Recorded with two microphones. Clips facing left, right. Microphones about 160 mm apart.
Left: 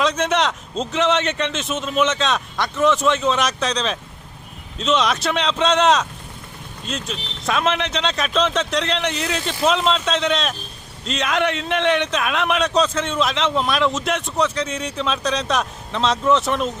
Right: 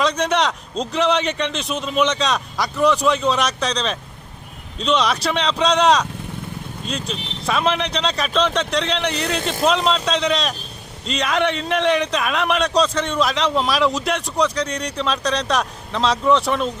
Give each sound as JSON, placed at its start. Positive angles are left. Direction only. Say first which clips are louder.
{"t": 0.0, "sound": "a man's voice", "louder": "even", "side_deg": 5}
{"t": 7.1, "sound": "a man's voice", "louder": "even", "side_deg": 0}